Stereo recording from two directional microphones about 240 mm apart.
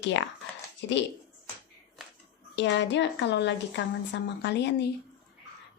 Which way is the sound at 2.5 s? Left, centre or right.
Left.